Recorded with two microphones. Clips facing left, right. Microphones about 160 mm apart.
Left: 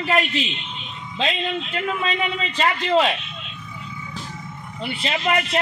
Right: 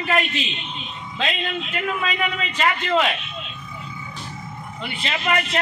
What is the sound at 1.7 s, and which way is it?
A man's voice, 25° left (ahead or behind).